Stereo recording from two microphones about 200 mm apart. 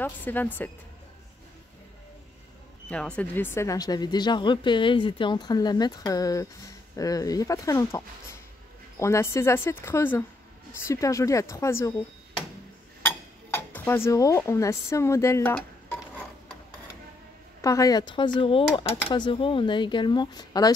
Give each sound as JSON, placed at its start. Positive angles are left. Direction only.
{"t": 0.0, "sound": "speech", "side_deg": 10}
{"t": 2.9, "sound": "speech", "side_deg": 5}
{"t": 13.0, "sound": "speech", "side_deg": 10}
{"t": 17.6, "sound": "speech", "side_deg": 15}